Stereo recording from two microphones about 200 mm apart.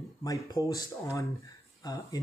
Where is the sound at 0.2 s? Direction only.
15° left (ahead or behind).